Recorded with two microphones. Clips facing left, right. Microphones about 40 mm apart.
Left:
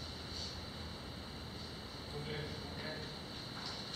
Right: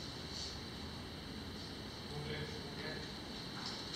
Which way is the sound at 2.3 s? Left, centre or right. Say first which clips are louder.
Even; centre.